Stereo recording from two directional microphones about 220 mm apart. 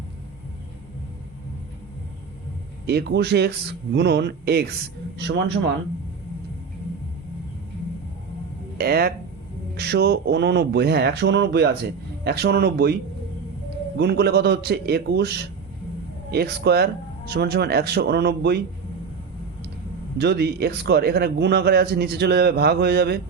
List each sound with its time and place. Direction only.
2.8 s a man's voice: 50° right (ahead or behind)
8.8 s a man's voice: 45° right (ahead or behind)
20.1 s a man's voice: 50° right (ahead or behind)